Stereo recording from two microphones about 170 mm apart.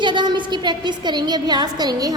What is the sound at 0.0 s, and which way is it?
A woman's voice, 25° right (ahead or behind).